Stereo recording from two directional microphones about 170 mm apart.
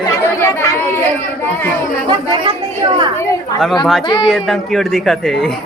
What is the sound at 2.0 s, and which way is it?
Speech, 30° right (ahead or behind).